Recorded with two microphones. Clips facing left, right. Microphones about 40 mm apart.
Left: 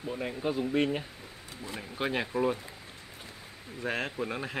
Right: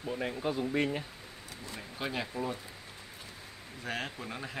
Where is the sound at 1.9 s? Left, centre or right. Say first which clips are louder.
Left 5 dB; left.